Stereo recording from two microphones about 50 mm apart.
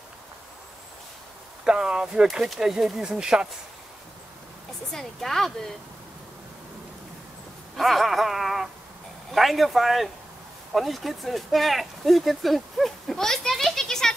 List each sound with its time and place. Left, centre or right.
1.6 s speech: centre
4.9 s speech: centre
7.7 s speech: centre